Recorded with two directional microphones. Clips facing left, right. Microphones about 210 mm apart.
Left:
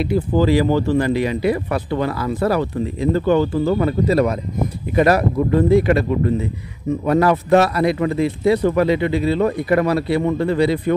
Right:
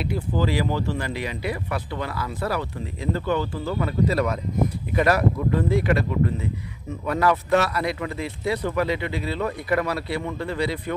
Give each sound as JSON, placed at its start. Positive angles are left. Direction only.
{"t": 0.0, "sound": "speech", "side_deg": 35}
{"t": 0.7, "sound": "speech", "side_deg": 45}
{"t": 4.1, "sound": "speech", "side_deg": 30}